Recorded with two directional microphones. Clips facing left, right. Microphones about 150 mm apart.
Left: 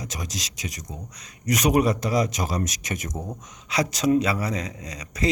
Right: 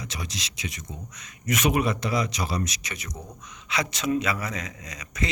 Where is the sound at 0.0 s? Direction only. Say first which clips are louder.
Left 2 dB; 45° left (ahead or behind).